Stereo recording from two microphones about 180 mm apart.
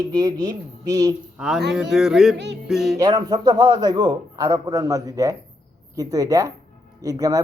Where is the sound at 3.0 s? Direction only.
20° right (ahead or behind).